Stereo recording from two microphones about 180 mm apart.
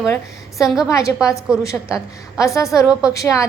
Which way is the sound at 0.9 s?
15° left (ahead or behind).